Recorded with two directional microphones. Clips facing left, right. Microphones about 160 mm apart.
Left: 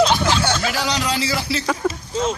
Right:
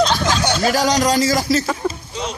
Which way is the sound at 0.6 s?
45° right (ahead or behind).